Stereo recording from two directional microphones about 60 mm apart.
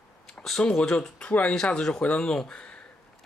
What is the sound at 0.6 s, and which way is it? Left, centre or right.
Speech, centre.